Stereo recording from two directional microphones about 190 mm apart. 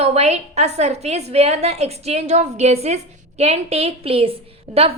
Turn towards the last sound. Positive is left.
turn(degrees=-35)  # may be behind; listen again after turning